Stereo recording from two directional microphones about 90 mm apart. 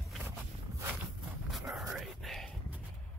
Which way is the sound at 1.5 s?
Centre (ahead or behind).